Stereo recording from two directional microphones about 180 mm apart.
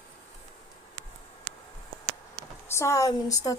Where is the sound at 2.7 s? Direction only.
15° left (ahead or behind).